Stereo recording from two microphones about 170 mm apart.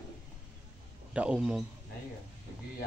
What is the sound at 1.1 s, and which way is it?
Speech, 5° right (ahead or behind).